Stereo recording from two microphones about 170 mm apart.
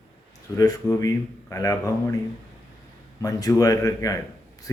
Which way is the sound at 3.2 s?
20° left (ahead or behind).